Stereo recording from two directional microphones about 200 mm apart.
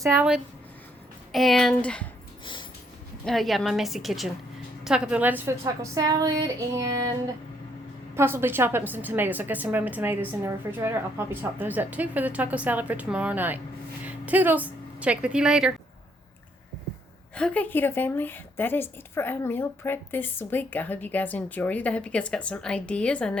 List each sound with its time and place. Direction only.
0.0 s a woman's voice: 10° right (ahead or behind); by 2.0 s 5° left (ahead or behind)
2.4 s dog: 25° left (ahead or behind)
3.2 s a woman's voice: centre (ahead or behind); by 6.9 s 15° right (ahead or behind)
8.1 s a woman's voice: 10° right (ahead or behind)
17.3 s a woman's voice: 5° left (ahead or behind)